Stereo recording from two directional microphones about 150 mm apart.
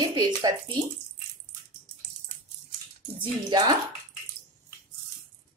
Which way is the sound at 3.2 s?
30° right (ahead or behind).